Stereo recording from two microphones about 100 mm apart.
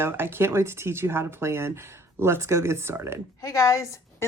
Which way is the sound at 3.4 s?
35° left (ahead or behind).